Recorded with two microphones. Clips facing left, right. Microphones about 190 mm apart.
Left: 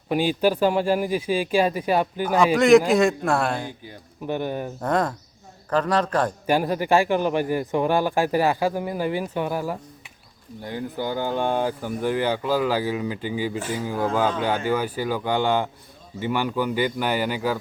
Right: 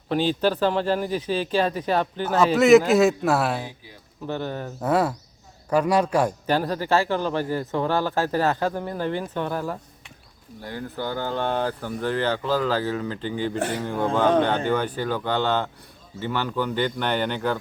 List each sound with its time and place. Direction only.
0.1 s speech: 10° left (ahead or behind)
2.6 s speech: centre (ahead or behind)
4.3 s speech: 15° left (ahead or behind)
4.8 s a man's voice: 5° right (ahead or behind)
6.5 s speech: 15° left (ahead or behind)
13.6 s speech: 65° right (ahead or behind)
13.8 s speech: 5° left (ahead or behind)